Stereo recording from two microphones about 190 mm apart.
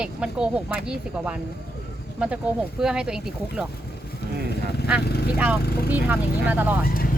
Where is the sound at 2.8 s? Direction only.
5° right (ahead or behind).